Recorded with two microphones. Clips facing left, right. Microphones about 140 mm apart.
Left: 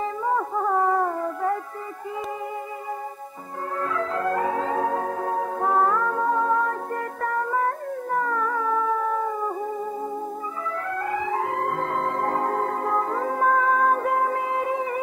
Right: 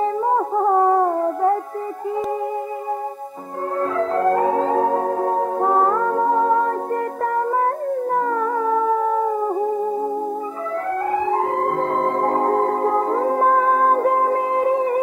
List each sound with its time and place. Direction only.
0.0 s music: 35° right (ahead or behind)
3.8 s music: 35° right (ahead or behind)
11.1 s music: 35° right (ahead or behind)